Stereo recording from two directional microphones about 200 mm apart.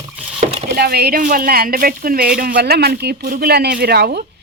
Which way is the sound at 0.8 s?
50° right (ahead or behind).